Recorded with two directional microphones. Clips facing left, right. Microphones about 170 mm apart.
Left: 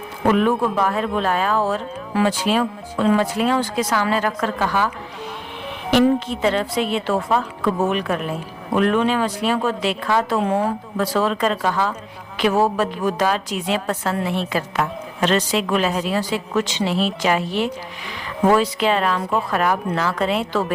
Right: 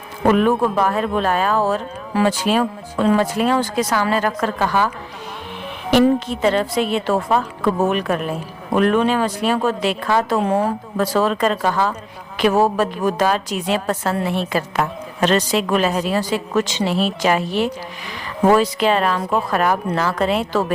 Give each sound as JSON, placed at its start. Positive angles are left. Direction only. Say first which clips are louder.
{"t": 0.3, "sound": "a woman's voice", "louder": "right 2 dB", "side_deg": -45}
{"t": 5.9, "sound": "a woman's voice", "louder": "right 2 dB", "side_deg": -40}